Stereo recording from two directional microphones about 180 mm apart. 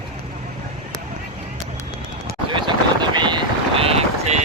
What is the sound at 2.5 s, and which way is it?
Vehicle, 25° right (ahead or behind).